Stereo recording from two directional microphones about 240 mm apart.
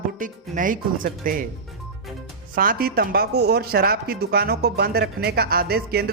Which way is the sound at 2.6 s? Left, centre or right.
Right.